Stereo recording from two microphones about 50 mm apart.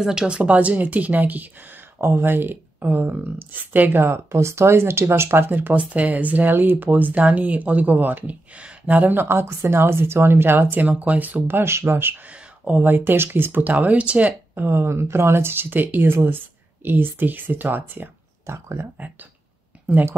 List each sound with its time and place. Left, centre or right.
0.0 s speech: centre
0.4 s speech: right
2.1 s speech: right
4.0 s speech: right
5.8 s speech: right
8.5 s a sound: right
8.9 s speech: right
9.2 s speech: right
11.6 s speech: right
12.3 s speech: right
14.5 s speech: right
18.5 s speech: right
19.9 s speech: right